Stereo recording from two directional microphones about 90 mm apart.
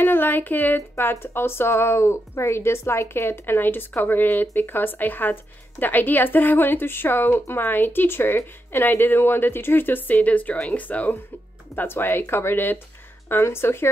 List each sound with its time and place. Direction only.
0.0 s speech: 25° left (ahead or behind)